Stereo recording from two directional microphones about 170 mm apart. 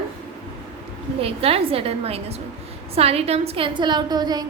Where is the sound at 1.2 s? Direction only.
35° right (ahead or behind).